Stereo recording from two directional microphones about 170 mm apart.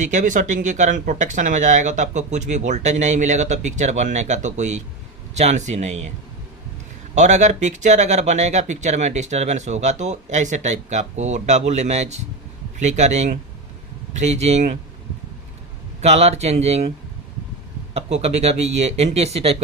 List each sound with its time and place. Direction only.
0.0 s speech: 45° right (ahead or behind)
7.2 s speech: 45° right (ahead or behind)
16.0 s speech: 40° right (ahead or behind)
17.9 s speech: 40° right (ahead or behind)